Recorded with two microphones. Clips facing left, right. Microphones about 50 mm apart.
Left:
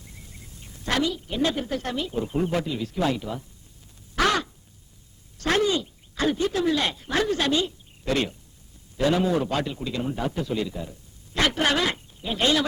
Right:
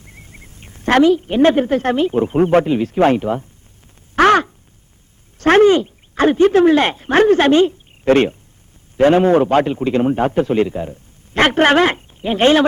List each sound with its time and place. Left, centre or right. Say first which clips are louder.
0.0 s a woman's voice: right 5 dB; right
4.1 s crow: right 11 dB; right
5.4 s a sound: right 13 dB; right
9.0 s a man's voice: right 11 dB; right